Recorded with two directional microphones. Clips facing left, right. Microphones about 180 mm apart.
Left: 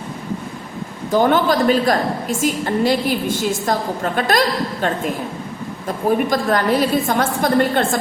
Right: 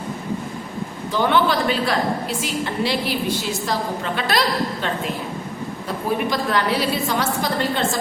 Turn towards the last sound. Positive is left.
turn(degrees=55)  # may be behind; listen again after turning